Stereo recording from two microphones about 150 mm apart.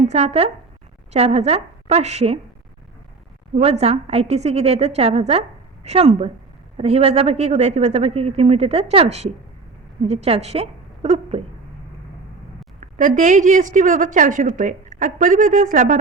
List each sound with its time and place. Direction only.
0.0 s a woman's voice: 45° right (ahead or behind)
3.5 s a woman's voice: 45° right (ahead or behind)
12.8 s a woman's voice: 55° right (ahead or behind)